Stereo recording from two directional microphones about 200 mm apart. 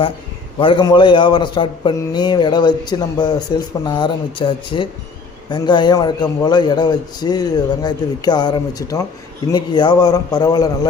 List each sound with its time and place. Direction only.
0.6 s a man's voice: 25° left (ahead or behind)